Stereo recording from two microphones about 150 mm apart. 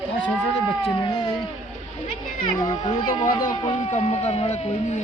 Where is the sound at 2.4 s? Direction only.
30° left (ahead or behind).